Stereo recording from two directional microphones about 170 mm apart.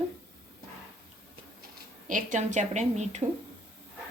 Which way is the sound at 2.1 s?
50° right (ahead or behind).